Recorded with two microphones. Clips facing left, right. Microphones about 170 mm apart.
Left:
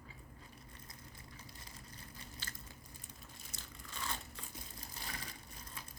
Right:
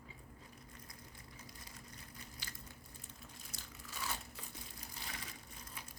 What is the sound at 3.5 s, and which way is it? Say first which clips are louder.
Crumpling: left 1 dB; 10° right (ahead or behind).